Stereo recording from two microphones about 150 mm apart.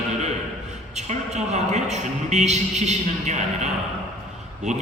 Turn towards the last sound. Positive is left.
turn(degrees=-50)  # may be behind; listen again after turning